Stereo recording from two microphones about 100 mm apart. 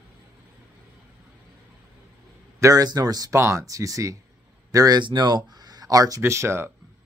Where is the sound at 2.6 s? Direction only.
30° right (ahead or behind).